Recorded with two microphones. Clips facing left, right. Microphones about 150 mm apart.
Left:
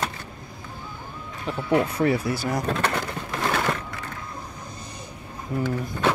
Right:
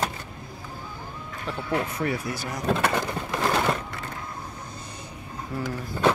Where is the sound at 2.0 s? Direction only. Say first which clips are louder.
Left 6 dB; 30° left (ahead or behind).